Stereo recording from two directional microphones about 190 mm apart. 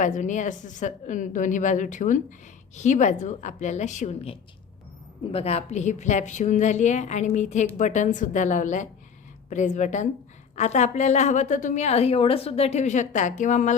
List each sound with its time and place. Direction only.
0.0 s a woman's voice: 40° left (ahead or behind)